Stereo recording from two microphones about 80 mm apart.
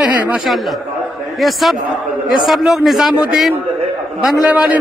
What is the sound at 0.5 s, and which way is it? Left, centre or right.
A man's voice, centre.